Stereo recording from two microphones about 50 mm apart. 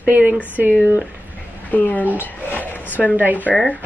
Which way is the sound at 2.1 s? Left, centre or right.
Left.